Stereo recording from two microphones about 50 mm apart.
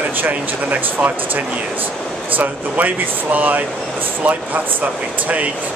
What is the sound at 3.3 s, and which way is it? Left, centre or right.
Speech, right.